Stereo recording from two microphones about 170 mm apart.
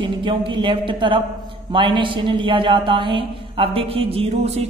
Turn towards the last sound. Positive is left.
turn(degrees=-35)  # may be behind; listen again after turning